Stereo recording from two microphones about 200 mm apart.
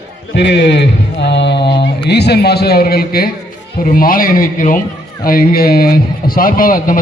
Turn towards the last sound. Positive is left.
turn(degrees=45)  # may be behind; listen again after turning